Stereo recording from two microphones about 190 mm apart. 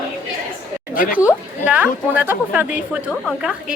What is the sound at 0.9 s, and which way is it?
Speech, 45° left (ahead or behind).